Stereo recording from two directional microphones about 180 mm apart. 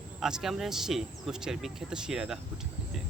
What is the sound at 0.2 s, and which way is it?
Speech, 5° right (ahead or behind).